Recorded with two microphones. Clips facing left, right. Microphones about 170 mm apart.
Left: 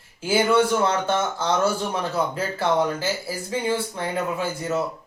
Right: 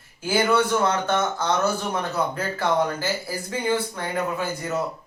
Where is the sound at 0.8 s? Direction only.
25° left (ahead or behind).